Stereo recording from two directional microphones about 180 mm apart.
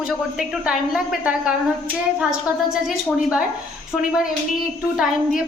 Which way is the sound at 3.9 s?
Centre (ahead or behind).